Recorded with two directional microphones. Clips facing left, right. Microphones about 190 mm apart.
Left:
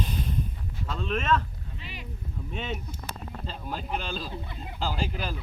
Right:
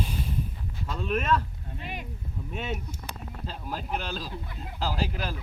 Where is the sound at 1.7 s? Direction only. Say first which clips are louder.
Right 7 dB; 50° right (ahead or behind).